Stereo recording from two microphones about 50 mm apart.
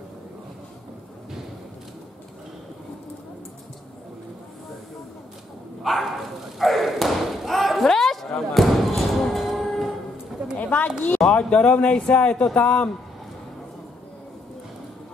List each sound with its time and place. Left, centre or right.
5.9 s thump: centre
10.6 s a sound: left
11.2 s speech: left